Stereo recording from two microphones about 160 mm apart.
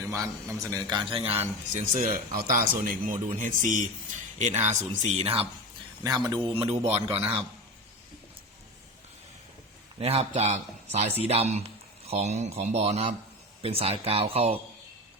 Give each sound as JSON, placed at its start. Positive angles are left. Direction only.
{"t": 0.1, "sound": "a man's voice", "side_deg": -20}
{"t": 1.7, "sound": "speech", "side_deg": -55}
{"t": 6.0, "sound": "a man's voice", "side_deg": -25}
{"t": 10.0, "sound": "speech", "side_deg": -40}